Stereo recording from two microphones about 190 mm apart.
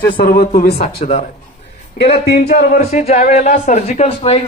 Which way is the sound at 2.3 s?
50° left (ahead or behind).